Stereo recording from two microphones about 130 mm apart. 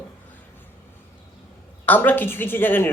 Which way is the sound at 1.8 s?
10° left (ahead or behind).